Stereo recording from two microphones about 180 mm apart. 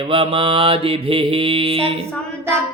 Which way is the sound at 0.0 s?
30° right (ahead or behind).